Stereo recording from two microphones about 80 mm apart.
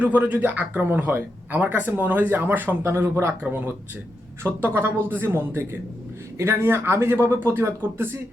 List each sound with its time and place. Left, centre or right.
0.0 s speech: right
4.4 s speech: right